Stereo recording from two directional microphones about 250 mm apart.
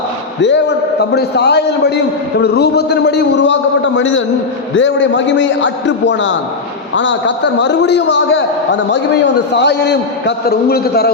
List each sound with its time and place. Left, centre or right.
0.4 s a man's voice: left